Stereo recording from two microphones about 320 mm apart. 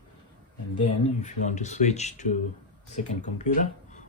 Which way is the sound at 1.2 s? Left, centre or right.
Left.